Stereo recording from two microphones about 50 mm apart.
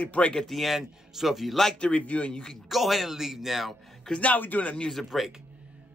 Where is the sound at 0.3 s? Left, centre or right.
Centre.